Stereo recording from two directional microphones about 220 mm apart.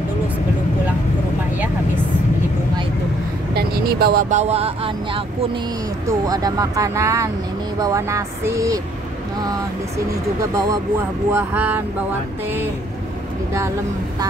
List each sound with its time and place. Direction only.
3.5 s speech: 45° right (ahead or behind); by 8.8 s 15° right (ahead or behind)
11.3 s speech: 10° right (ahead or behind)